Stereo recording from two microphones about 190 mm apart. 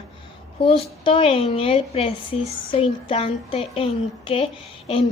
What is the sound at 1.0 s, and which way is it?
A child's voice, 30° left (ahead or behind).